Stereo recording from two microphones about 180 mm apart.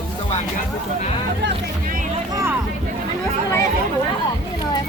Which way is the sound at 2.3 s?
15° right (ahead or behind).